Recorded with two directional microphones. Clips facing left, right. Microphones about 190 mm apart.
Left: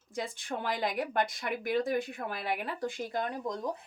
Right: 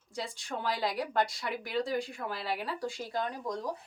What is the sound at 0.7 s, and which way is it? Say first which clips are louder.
Speech: even; 20° left (ahead or behind).